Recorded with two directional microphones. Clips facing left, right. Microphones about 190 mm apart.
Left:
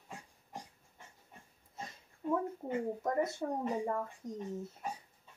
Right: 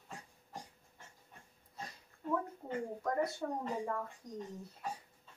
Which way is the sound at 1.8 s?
20° left (ahead or behind).